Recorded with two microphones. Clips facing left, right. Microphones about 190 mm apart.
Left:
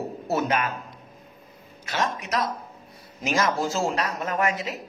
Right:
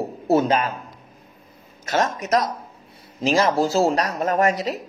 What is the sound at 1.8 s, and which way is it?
A woman's voice, 45° right (ahead or behind).